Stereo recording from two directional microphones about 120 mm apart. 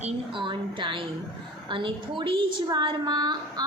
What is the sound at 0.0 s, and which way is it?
A woman's voice, 45° right (ahead or behind).